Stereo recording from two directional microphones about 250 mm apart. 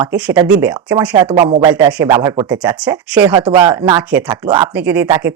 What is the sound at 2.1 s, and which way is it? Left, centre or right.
Speech, centre.